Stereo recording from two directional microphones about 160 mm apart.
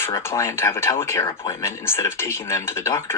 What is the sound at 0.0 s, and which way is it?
Speech, 15° left (ahead or behind).